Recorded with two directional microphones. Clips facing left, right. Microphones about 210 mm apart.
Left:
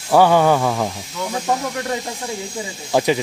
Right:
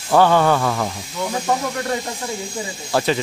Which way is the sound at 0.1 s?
10° left (ahead or behind).